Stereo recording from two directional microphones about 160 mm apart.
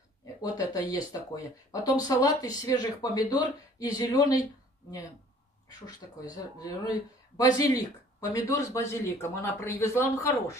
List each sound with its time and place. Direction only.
0.4 s speech: 25° left (ahead or behind)
5.7 s speech: 25° left (ahead or behind)